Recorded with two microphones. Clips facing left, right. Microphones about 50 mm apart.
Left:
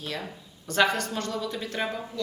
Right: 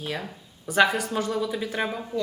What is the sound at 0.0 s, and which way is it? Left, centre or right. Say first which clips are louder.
Speech: right 2 dB; centre.